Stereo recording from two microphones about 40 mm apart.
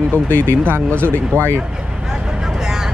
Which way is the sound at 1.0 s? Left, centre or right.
Right.